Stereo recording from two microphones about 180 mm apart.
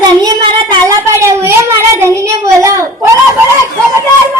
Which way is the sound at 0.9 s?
15° right (ahead or behind).